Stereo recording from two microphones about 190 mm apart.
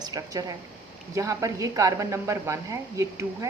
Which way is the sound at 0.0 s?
20° right (ahead or behind).